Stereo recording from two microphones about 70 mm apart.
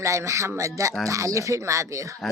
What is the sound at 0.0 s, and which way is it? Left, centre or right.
Speech, right.